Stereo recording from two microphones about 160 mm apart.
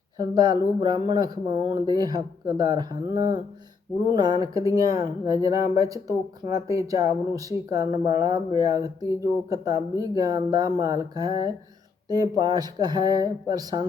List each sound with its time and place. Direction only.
0.2 s speech: 25° right (ahead or behind)